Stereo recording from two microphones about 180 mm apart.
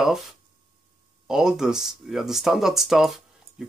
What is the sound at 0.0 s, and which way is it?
Speech, centre (ahead or behind).